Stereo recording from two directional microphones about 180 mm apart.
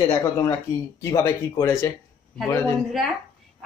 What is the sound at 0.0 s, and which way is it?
Speech, 20° left (ahead or behind).